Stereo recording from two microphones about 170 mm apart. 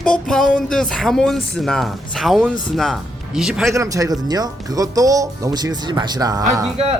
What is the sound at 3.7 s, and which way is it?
Speech, 20° right (ahead or behind).